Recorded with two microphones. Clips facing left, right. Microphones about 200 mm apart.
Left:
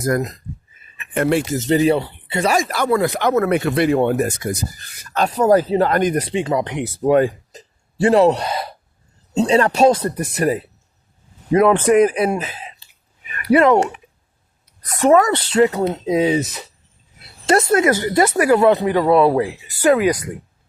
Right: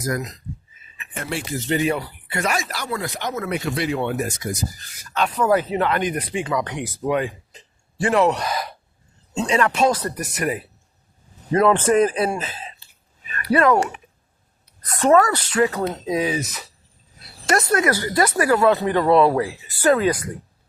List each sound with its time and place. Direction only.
0.0 s speech: 55° left (ahead or behind); by 2.6 s 30° left (ahead or behind)
2.6 s speech: 55° left (ahead or behind)
5.1 s speech: 40° left (ahead or behind)
6.3 s speech: 25° left (ahead or behind)
7.0 s speech: 40° left (ahead or behind)
11.5 s a woman's voice: 15° left (ahead or behind)
15.3 s speech: 30° left (ahead or behind); by 20.1 s 15° left (ahead or behind)